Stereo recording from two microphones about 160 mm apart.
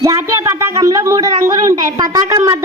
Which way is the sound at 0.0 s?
20° right (ahead or behind).